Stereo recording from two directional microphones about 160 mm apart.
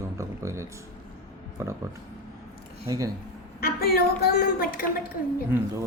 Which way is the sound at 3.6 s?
75° left (ahead or behind).